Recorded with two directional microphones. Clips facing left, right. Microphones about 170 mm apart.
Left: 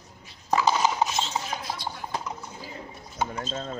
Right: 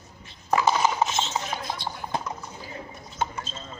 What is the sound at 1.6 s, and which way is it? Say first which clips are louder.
Music: right 1 dB; 20° right (ahead or behind).